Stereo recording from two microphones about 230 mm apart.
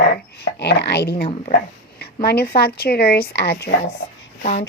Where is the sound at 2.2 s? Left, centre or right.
Left.